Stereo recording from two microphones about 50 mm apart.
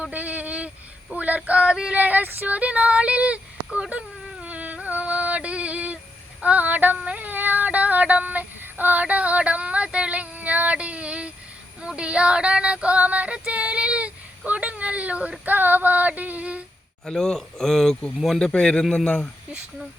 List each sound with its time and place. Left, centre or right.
0.1 s a sound: right
2.0 s female singing: right
2.2 s speech: right
6.4 s female singing: right
7.0 s a sound: right
7.3 s child singing: right
11.8 s female singing: right
15.4 s female singing: right
17.1 s a man's voice: centre